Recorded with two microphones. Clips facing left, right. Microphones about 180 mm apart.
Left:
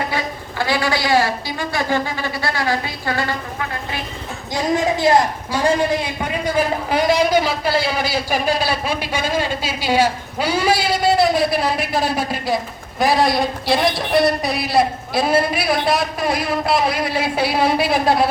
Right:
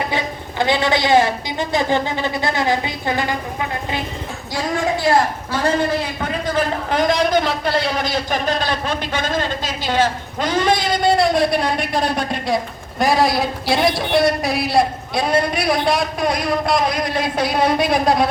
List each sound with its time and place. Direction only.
0.6 s a woman's voice: 20° right (ahead or behind)
5.1 s a woman's voice: 20° left (ahead or behind)
6.2 s a man's voice: 10° left (ahead or behind)